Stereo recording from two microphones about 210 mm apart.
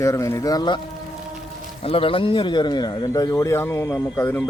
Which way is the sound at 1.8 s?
25° left (ahead or behind).